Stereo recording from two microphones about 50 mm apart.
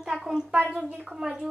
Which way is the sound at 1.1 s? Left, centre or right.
Centre.